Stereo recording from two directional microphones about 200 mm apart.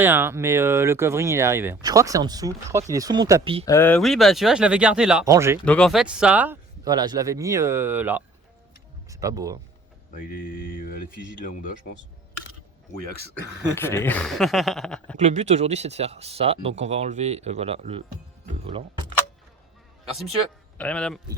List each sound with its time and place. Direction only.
0.0 s speech: 10° right (ahead or behind); by 3.7 s 25° right (ahead or behind)
3.7 s speech: 10° left (ahead or behind)
5.2 s speech: 15° right (ahead or behind)
5.6 s speech: 5° left (ahead or behind); by 9.6 s 15° right (ahead or behind)
10.2 s mantra: 45° left (ahead or behind)
13.0 s speech: 55° right (ahead or behind)
13.7 s speech: 10° left (ahead or behind)
15.2 s speech: 35° right (ahead or behind)
20.7 s speech: 5° left (ahead or behind)